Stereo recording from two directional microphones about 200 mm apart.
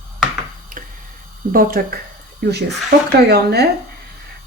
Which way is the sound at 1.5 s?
45° right (ahead or behind).